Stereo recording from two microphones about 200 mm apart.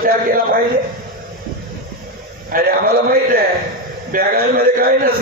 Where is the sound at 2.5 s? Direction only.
45° right (ahead or behind).